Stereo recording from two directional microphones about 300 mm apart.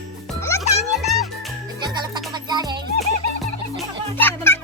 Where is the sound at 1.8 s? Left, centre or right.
Centre.